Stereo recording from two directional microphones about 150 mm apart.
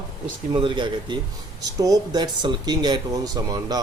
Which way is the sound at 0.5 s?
35° right (ahead or behind).